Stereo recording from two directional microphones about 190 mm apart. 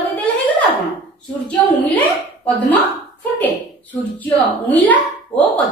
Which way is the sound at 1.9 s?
10° left (ahead or behind).